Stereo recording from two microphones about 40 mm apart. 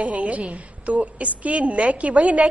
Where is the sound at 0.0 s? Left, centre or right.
Right.